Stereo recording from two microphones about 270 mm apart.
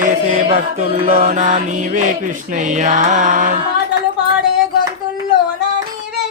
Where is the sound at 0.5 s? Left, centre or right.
Right.